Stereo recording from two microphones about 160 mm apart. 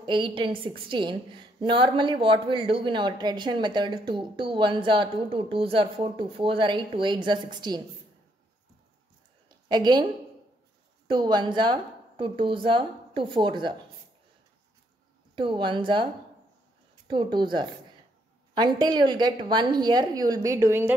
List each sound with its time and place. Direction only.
0.0 s a woman's voice: 30° right (ahead or behind)
9.7 s a woman's voice: 25° right (ahead or behind)
11.1 s a woman's voice: 30° right (ahead or behind)
15.3 s a woman's voice: 30° right (ahead or behind)
17.1 s a woman's voice: 30° right (ahead or behind)
18.5 s a woman's voice: 25° right (ahead or behind)